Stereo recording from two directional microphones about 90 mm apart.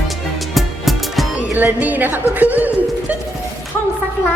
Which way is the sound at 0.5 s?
Centre (ahead or behind).